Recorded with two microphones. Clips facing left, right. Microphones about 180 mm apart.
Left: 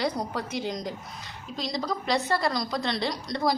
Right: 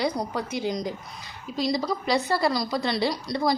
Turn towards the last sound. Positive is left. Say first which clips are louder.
# right 2 dB
turn(degrees=-5)  # may be behind; listen again after turning